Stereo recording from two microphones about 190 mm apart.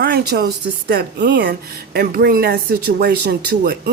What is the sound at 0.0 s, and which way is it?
A woman's voice, 55° right (ahead or behind).